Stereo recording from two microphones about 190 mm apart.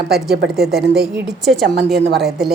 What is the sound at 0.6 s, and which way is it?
Speech, centre (ahead or behind).